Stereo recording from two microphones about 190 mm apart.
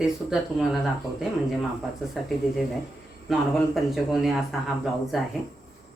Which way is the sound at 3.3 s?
Centre (ahead or behind).